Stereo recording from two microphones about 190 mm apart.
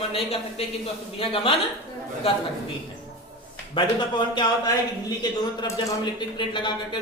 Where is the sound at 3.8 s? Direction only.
25° left (ahead or behind).